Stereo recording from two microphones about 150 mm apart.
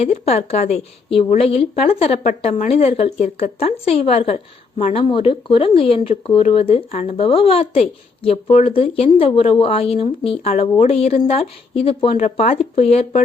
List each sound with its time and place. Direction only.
0.0 s a woman's voice: 45° left (ahead or behind)